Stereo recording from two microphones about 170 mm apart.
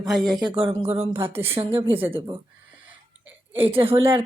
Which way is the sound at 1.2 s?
35° right (ahead or behind).